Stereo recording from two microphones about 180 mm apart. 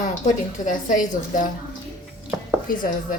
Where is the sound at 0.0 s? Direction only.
45° left (ahead or behind).